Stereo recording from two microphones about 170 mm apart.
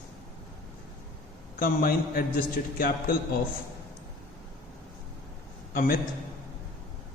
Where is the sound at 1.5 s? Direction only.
60° left (ahead or behind).